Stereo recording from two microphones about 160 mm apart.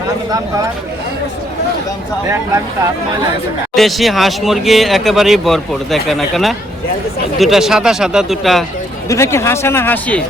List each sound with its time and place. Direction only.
3.8 s speech: centre (ahead or behind)
9.0 s speech: 20° left (ahead or behind)